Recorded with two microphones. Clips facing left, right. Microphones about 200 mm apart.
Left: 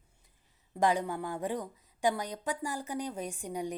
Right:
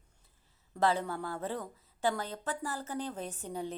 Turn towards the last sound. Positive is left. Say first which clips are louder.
# left 2 dB
turn(degrees=15)  # may be behind; listen again after turning